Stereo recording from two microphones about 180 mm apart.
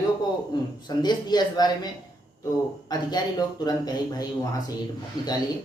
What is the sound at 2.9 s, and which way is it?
A woman's voice, 20° left (ahead or behind).